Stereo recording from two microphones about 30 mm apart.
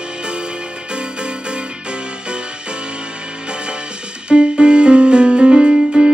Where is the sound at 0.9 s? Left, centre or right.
Right.